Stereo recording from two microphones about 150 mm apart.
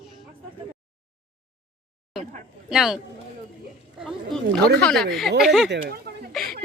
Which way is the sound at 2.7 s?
5° right (ahead or behind).